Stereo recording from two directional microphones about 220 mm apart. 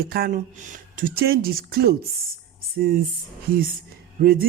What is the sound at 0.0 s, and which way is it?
Speech, 45° right (ahead or behind).